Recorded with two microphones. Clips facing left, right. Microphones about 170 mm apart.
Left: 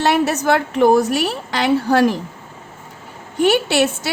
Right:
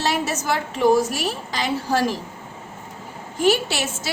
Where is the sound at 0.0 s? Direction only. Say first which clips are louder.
Left 7 dB; 60° left (ahead or behind).